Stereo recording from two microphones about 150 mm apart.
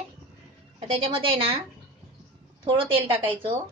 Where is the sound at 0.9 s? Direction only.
35° right (ahead or behind).